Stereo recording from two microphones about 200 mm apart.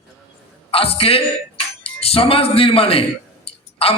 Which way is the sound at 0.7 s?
30° left (ahead or behind).